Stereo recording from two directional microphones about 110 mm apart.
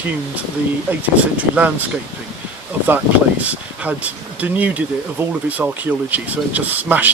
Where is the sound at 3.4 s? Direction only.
15° right (ahead or behind).